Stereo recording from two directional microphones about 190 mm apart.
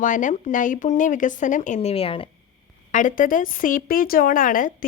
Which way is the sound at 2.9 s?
45° left (ahead or behind).